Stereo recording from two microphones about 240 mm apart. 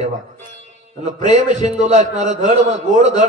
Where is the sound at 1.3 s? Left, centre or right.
Right.